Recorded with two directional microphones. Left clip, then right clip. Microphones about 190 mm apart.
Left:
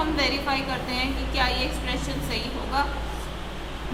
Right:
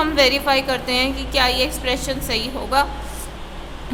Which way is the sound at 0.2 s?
55° right (ahead or behind).